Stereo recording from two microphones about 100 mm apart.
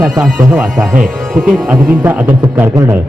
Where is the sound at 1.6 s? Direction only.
15° right (ahead or behind).